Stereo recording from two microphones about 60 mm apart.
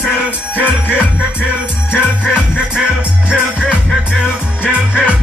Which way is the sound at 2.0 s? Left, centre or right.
Centre.